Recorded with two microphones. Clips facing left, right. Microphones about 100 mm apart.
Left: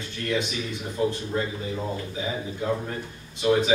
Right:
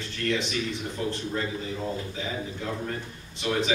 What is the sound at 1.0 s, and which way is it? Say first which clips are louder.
Speech: left 6 dB; 20° left (ahead or behind).